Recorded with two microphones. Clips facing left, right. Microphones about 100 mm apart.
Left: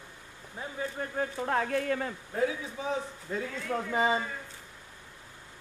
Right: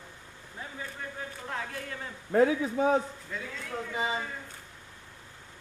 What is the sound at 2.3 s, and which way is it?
Speech, 60° right (ahead or behind).